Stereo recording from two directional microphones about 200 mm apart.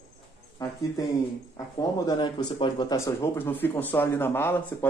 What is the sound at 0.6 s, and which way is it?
Speech, 20° left (ahead or behind).